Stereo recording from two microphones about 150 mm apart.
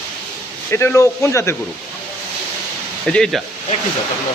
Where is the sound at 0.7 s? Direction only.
15° left (ahead or behind).